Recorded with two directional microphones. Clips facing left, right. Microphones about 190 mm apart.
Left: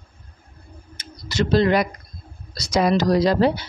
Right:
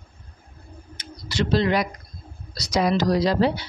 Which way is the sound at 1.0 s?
45° left (ahead or behind).